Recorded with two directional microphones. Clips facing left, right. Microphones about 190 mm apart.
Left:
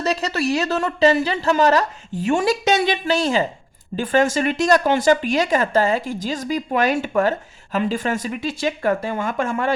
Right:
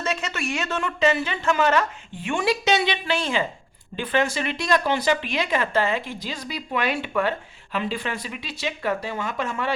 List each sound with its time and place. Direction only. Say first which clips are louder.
0.0 s speech: left 6 dB; 35° left (ahead or behind)